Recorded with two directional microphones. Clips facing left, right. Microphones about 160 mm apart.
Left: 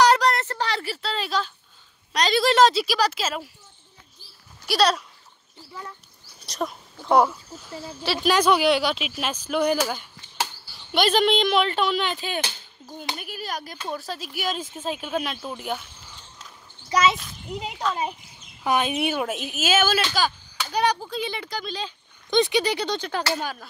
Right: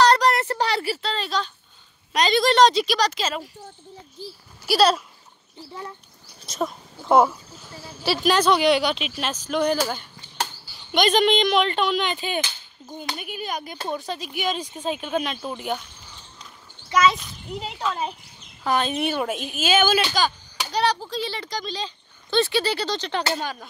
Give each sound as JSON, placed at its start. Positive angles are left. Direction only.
{"t": 0.2, "sound": "a sound", "side_deg": -5}
{"t": 1.0, "sound": "a sound", "side_deg": 10}
{"t": 2.1, "sound": "speech", "side_deg": 0}
{"t": 4.6, "sound": "speech", "side_deg": -5}
{"t": 6.4, "sound": "speech", "side_deg": 0}
{"t": 16.9, "sound": "a child's voice", "side_deg": 25}
{"t": 17.2, "sound": "speech", "side_deg": 0}
{"t": 18.6, "sound": "speech", "side_deg": 10}